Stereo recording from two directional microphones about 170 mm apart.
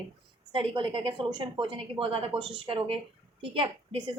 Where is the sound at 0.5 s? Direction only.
30° right (ahead or behind).